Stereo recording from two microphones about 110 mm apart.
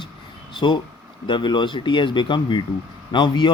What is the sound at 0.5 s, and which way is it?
Speech, 45° left (ahead or behind).